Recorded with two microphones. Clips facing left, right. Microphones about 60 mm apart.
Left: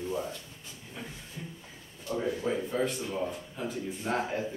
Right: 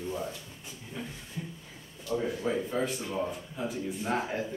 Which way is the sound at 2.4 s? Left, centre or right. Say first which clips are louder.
Even; centre.